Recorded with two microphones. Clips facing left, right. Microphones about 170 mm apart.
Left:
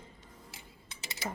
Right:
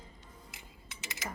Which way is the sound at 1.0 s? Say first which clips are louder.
Left 1 dB; 35° left (ahead or behind).